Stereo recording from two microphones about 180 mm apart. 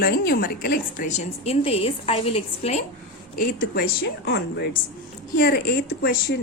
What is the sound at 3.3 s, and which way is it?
A woman's voice, 65° left (ahead or behind).